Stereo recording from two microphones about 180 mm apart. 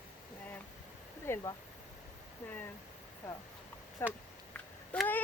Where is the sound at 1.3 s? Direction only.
20° left (ahead or behind).